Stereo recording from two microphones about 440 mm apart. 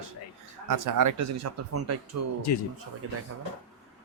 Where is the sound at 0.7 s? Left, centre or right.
Right.